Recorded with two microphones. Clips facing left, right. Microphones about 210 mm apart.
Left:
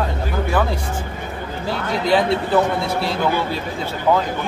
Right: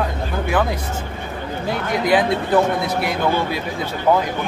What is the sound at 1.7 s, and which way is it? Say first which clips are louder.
Speech: even; 15° right (ahead or behind).